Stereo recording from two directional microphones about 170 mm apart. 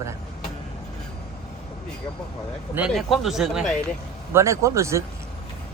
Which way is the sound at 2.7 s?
5° right (ahead or behind).